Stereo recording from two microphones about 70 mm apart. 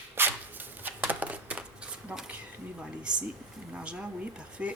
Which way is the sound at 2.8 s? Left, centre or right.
Centre.